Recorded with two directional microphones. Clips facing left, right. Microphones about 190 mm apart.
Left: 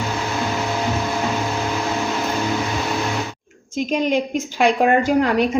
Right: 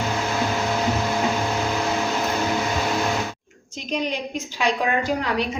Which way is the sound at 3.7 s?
50° left (ahead or behind).